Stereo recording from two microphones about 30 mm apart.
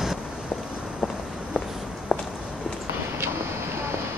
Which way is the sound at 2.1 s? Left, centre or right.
Left.